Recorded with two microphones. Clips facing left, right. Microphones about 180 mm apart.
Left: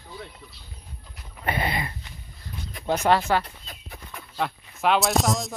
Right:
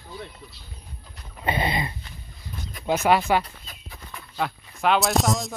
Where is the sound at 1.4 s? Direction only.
20° right (ahead or behind).